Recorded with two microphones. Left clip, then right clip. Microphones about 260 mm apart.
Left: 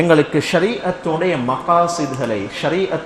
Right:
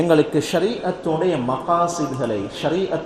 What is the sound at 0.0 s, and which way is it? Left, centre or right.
Speech, left.